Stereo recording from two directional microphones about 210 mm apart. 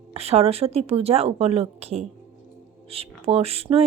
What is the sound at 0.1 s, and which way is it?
A woman's voice, 30° right (ahead or behind).